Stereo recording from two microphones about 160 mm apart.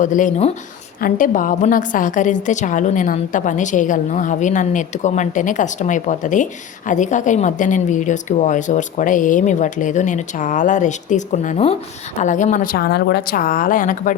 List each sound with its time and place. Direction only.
0.0 s a woman's voice: 50° left (ahead or behind)
12.7 s speech: 80° left; by 14.2 s 55° left (ahead or behind)